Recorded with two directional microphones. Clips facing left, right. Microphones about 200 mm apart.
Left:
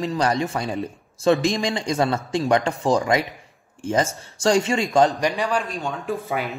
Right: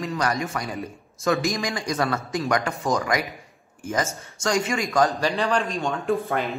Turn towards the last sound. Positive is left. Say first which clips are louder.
# right 2 dB
turn(degrees=0)  # may be behind; listen again after turning